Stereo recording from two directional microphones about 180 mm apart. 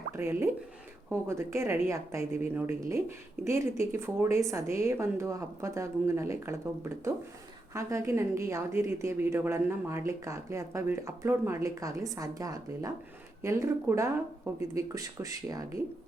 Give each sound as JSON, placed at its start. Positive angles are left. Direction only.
{"t": 0.2, "sound": "a woman's voice", "side_deg": -15}